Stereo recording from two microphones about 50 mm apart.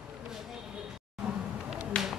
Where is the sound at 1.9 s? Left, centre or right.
Centre.